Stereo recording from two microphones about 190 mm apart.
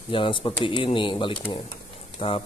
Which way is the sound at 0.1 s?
25° left (ahead or behind).